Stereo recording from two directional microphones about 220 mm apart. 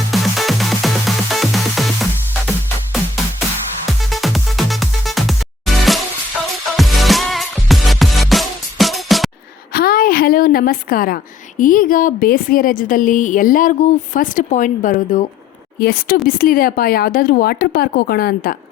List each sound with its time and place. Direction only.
0.1 s music: centre (ahead or behind)
3.8 s music: centre (ahead or behind)
9.7 s a woman's voice: 40° left (ahead or behind)